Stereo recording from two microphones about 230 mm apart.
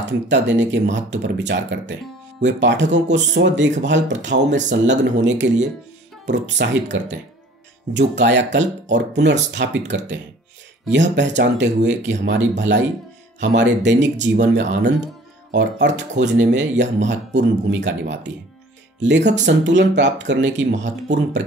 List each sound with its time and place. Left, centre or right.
0.0 s speech: right